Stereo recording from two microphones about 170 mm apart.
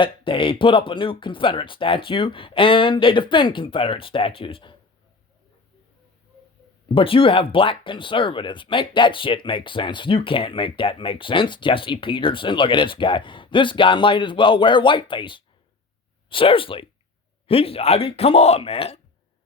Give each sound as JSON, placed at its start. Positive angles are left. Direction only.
{"t": 0.0, "sound": "speech", "side_deg": 30}
{"t": 6.8, "sound": "speech", "side_deg": 30}